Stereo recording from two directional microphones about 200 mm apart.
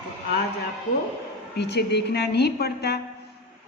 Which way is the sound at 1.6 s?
60° left (ahead or behind).